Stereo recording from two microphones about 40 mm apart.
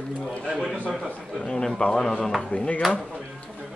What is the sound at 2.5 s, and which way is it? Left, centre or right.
Speech, left.